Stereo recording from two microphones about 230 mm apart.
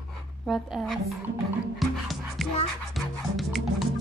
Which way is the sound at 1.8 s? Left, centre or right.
Centre.